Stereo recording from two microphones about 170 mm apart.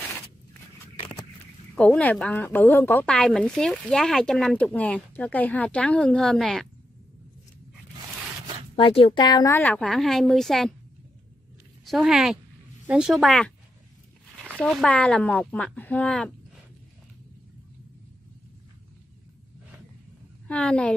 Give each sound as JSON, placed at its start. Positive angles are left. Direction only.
{"t": 1.8, "sound": "speech", "side_deg": 10}
{"t": 8.7, "sound": "a woman's voice", "side_deg": 35}
{"t": 9.6, "sound": "a woman's voice", "side_deg": 5}
{"t": 11.8, "sound": "a woman's voice", "side_deg": 0}
{"t": 14.6, "sound": "speech", "side_deg": 0}
{"t": 20.4, "sound": "speech", "side_deg": 5}